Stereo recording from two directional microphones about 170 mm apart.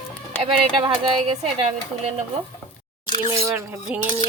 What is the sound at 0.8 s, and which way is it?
Speech, 30° right (ahead or behind).